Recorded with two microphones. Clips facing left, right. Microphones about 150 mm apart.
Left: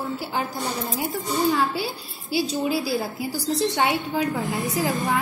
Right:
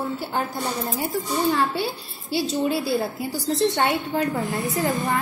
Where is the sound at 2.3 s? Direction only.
Centre (ahead or behind).